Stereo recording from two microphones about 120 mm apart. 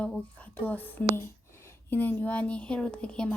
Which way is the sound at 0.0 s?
10° left (ahead or behind).